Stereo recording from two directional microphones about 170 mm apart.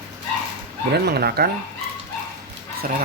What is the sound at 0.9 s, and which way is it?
Speech, 70° right (ahead or behind).